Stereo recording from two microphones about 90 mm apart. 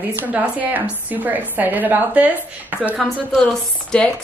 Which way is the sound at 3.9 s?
10° left (ahead or behind).